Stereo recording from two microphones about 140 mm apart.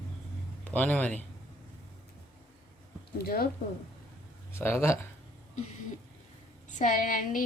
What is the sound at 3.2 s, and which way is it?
Speech, 90° left.